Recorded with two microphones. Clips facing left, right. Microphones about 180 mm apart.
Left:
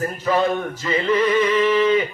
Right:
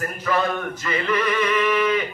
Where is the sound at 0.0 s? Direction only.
25° left (ahead or behind).